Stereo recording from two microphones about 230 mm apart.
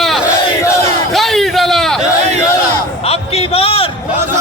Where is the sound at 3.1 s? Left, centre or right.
Left.